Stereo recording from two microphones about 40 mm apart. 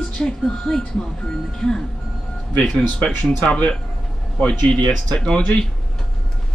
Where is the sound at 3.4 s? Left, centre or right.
Left.